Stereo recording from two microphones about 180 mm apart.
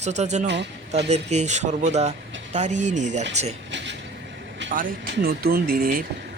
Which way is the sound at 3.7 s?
85° right.